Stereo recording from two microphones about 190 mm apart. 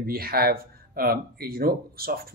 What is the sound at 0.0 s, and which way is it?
Speech, 50° right (ahead or behind).